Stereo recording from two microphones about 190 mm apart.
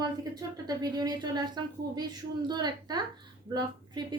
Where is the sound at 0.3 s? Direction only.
20° right (ahead or behind).